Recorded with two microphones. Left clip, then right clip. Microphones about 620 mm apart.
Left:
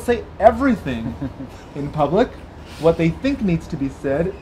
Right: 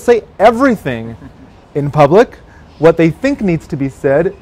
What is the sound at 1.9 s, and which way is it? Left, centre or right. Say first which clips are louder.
Speech: right 10 dB; right.